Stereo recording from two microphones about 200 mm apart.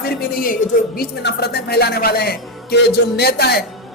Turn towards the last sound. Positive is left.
turn(degrees=55)  # may be behind; listen again after turning